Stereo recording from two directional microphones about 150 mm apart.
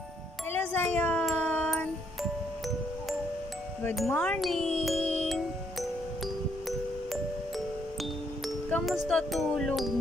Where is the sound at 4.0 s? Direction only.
5° left (ahead or behind).